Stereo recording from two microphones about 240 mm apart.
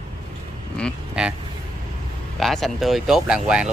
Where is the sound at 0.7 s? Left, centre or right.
Centre.